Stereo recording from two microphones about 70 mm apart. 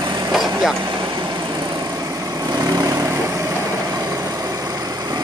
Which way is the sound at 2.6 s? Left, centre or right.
Right.